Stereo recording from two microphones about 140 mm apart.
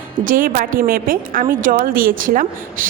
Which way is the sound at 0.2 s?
80° right.